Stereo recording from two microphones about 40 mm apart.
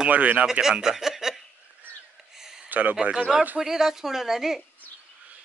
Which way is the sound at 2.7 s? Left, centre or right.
Right.